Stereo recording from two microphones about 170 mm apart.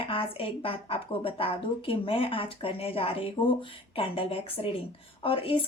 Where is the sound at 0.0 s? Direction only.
30° left (ahead or behind).